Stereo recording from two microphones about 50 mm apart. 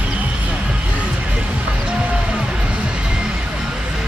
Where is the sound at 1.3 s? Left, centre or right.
Centre.